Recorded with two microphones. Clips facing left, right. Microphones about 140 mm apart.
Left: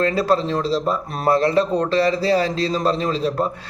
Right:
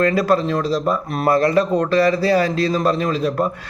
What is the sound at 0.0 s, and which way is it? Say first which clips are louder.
Speech: right 2 dB; 30° left (ahead or behind).